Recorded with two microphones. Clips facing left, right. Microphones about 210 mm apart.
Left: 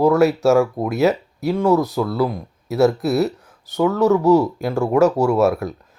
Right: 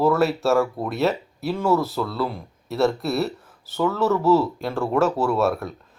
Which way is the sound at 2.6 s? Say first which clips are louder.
Left 5 dB; centre (ahead or behind).